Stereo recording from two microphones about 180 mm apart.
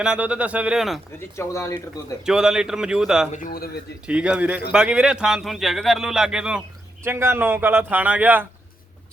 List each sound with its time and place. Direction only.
0.0 s a man's voice: 5° right (ahead or behind)
1.4 s speech: 15° left (ahead or behind)
2.2 s a man's voice: 5° right (ahead or behind)
3.3 s a man's voice: 50° left (ahead or behind)
4.0 s a man's voice: 5° right (ahead or behind)